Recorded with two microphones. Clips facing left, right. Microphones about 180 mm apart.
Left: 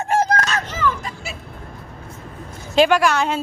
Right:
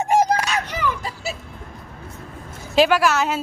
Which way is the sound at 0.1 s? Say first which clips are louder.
Even; 10° right (ahead or behind).